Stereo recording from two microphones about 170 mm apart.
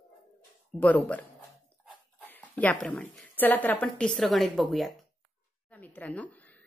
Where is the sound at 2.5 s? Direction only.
10° left (ahead or behind).